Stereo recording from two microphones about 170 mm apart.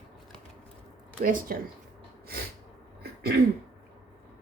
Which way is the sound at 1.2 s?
55° right (ahead or behind).